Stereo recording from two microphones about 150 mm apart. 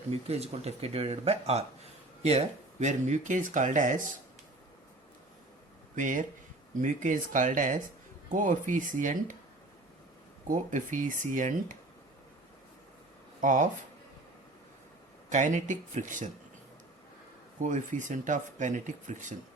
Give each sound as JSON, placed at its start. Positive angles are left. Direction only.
{"t": 0.1, "sound": "speech", "side_deg": -45}
{"t": 6.0, "sound": "speech", "side_deg": -60}
{"t": 10.5, "sound": "speech", "side_deg": -60}
{"t": 13.4, "sound": "speech", "side_deg": -60}
{"t": 15.3, "sound": "speech", "side_deg": -55}
{"t": 17.6, "sound": "speech", "side_deg": -55}